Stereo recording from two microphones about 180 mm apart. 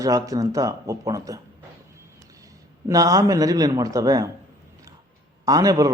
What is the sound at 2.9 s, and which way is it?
Speech, 20° right (ahead or behind).